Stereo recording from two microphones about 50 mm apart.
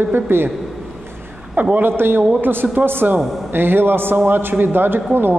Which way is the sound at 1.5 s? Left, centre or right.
Right.